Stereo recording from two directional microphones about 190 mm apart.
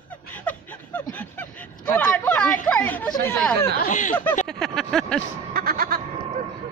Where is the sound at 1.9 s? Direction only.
10° left (ahead or behind).